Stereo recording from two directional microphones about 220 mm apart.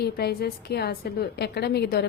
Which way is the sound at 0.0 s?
45° left (ahead or behind).